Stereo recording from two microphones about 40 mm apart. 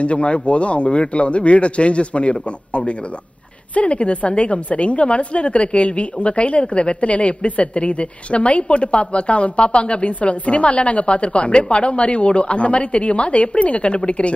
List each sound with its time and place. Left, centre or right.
0.0 s a woman's voice: left